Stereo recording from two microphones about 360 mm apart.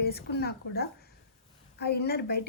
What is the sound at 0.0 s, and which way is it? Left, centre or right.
A woman's voice, left.